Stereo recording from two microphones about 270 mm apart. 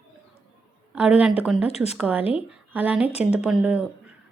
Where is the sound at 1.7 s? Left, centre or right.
Left.